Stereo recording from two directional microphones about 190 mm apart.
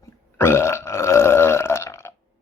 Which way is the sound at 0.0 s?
15° left (ahead or behind).